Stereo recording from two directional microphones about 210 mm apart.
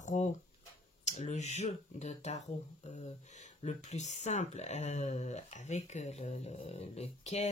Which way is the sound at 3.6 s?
30° left (ahead or behind).